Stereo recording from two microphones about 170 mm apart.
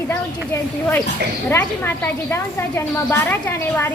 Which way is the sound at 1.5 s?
15° left (ahead or behind).